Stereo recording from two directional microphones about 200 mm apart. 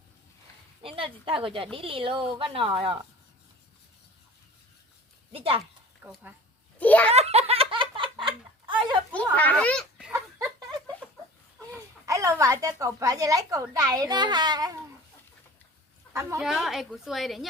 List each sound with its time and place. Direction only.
0.8 s a woman's voice: 25° right (ahead or behind)
5.3 s a woman's voice: 30° right (ahead or behind)
6.0 s speech: 5° right (ahead or behind)
6.7 s a child's voice: 5° left (ahead or behind)
7.1 s giggle: 30° right (ahead or behind)
9.3 s speech: 5° left (ahead or behind)
11.7 s speech: 15° right (ahead or behind)
16.1 s a sound: 5° left (ahead or behind)
16.4 s a woman's voice: centre (ahead or behind)